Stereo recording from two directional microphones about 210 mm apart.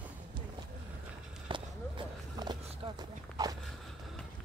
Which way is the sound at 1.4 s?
20° right (ahead or behind).